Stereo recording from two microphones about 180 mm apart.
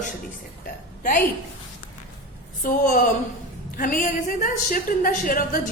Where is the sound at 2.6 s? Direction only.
50° left (ahead or behind).